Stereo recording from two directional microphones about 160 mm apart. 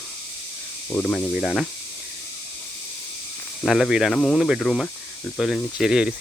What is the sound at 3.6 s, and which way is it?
Speech, centre (ahead or behind).